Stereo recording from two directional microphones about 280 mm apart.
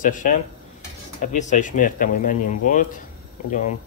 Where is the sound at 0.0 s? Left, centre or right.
Left.